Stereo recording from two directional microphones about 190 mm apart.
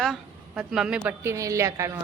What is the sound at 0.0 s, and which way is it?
A woman's voice, centre (ahead or behind).